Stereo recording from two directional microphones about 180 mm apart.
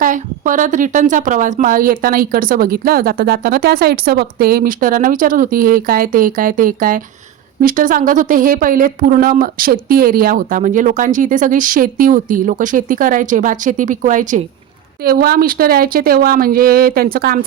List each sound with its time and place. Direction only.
0.0 s a woman's voice: 45° right (ahead or behind)
15.0 s a woman's voice: 55° right (ahead or behind)